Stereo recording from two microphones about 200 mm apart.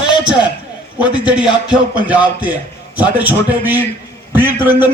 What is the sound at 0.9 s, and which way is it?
A man's voice, 5° right (ahead or behind).